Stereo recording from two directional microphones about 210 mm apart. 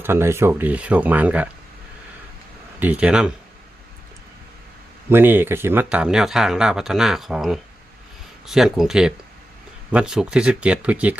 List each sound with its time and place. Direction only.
0.0 s speech: 10° right (ahead or behind)
2.8 s speech: 5° right (ahead or behind)
5.0 s speech: 10° right (ahead or behind)